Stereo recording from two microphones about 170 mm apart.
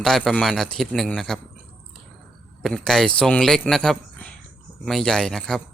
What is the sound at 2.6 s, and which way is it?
Speech, centre (ahead or behind).